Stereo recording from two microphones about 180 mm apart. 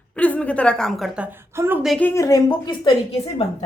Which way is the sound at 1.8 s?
5° left (ahead or behind).